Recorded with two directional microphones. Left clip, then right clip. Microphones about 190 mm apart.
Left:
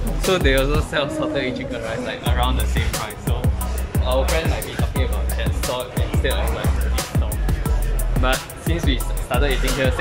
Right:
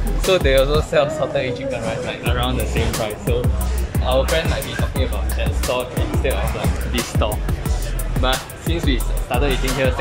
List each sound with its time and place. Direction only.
0.2 s speech: centre (ahead or behind)
8.2 s speech: centre (ahead or behind)